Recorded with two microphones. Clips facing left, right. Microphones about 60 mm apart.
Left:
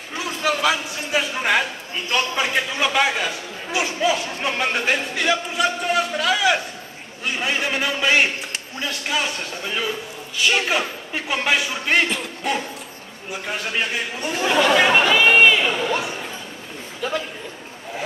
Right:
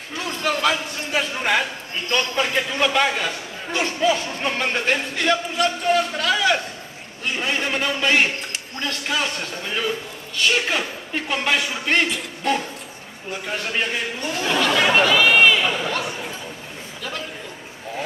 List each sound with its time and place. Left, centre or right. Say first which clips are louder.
0.2 s a man's voice: even; centre
12.4 s a sound: right 2 dB; centre
13.3 s a man's voice: even; centre
14.2 s speech: left 3 dB; centre